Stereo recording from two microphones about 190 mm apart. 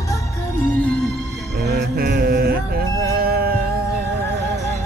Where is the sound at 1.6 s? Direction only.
60° right (ahead or behind).